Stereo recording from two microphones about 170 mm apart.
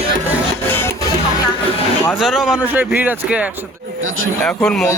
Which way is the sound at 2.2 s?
5° right (ahead or behind).